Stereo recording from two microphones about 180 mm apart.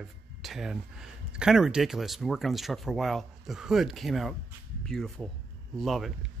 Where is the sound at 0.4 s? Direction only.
Centre (ahead or behind).